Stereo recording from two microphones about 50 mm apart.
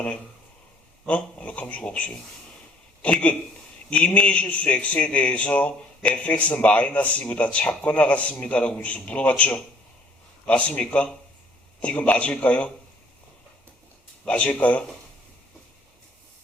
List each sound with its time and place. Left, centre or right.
1.0 s a man's voice: left
14.3 s a man's voice: left